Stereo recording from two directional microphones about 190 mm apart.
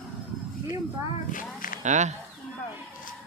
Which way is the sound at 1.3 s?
45° left (ahead or behind).